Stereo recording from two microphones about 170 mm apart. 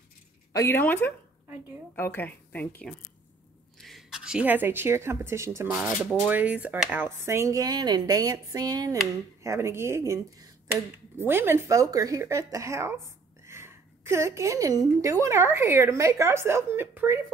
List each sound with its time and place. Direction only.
0.5 s a woman's voice: 15° left (ahead or behind); by 5.8 s 15° right (ahead or behind)
5.8 s speech: 5° right (ahead or behind)